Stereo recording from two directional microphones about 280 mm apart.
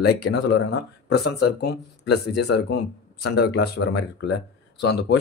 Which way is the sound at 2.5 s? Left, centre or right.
Left.